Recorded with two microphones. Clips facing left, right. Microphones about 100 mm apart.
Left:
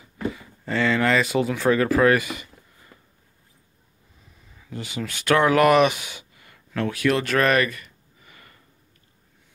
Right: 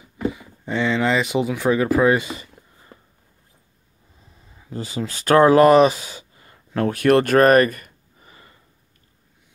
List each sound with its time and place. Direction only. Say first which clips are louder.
0.3 s speech: right 1 dB; 15° right (ahead or behind)
2.1 s a sound: right 1 dB; 25° right (ahead or behind)
4.6 s speech: right 4 dB; 30° right (ahead or behind)
6.9 s speech: right 7 dB; 50° right (ahead or behind)
8.3 s sniff: right 2 dB; 25° right (ahead or behind)